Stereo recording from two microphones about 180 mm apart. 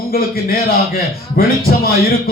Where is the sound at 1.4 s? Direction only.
55° left (ahead or behind).